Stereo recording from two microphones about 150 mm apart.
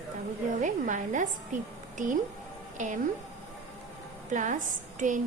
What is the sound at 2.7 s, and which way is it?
Speech, 60° right (ahead or behind).